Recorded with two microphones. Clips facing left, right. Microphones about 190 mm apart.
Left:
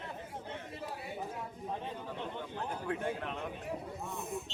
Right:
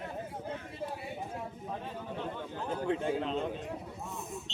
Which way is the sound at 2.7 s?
25° right (ahead or behind).